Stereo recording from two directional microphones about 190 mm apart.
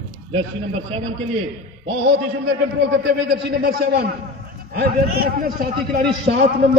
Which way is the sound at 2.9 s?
60° right (ahead or behind).